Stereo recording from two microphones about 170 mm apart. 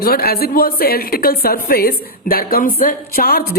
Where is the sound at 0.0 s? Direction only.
65° left (ahead or behind).